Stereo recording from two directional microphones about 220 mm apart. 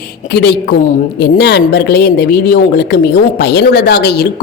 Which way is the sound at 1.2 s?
50° left (ahead or behind).